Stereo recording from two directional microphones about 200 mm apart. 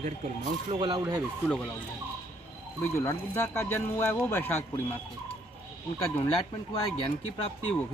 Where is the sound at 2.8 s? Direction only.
10° left (ahead or behind).